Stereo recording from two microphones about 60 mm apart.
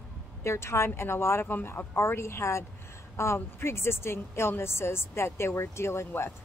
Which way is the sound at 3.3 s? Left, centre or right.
Left.